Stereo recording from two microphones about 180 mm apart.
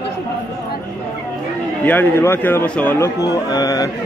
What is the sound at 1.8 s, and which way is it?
Speech, 10° left (ahead or behind).